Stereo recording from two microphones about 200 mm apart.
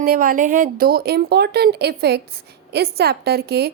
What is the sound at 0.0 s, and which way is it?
A woman's voice, 45° right (ahead or behind).